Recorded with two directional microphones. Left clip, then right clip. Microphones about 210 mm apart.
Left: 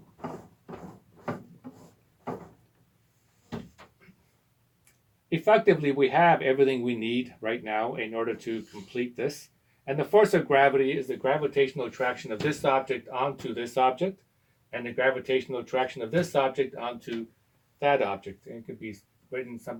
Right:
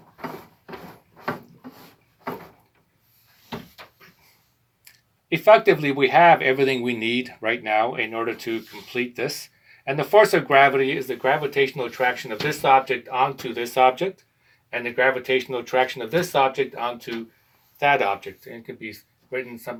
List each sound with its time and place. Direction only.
5.3 s speech: 25° right (ahead or behind)
19.3 s speech: 15° right (ahead or behind)